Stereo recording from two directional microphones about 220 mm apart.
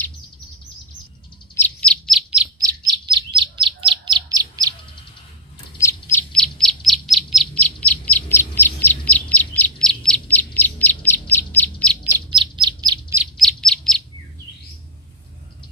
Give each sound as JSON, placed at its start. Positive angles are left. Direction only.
{"t": 1.5, "sound": "bird", "side_deg": 5}
{"t": 2.6, "sound": "chirp", "side_deg": -20}
{"t": 6.1, "sound": "bird", "side_deg": 5}
{"t": 12.3, "sound": "bird", "side_deg": -20}
{"t": 13.2, "sound": "bird", "side_deg": 0}